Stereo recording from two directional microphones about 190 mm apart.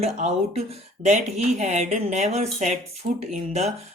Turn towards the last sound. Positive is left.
turn(degrees=-35)  # may be behind; listen again after turning